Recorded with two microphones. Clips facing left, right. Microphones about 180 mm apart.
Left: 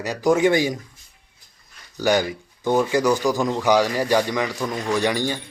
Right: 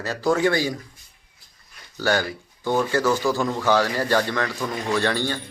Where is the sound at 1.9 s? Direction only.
15° left (ahead or behind).